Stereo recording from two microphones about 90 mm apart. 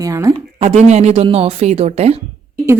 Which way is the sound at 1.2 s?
90° right.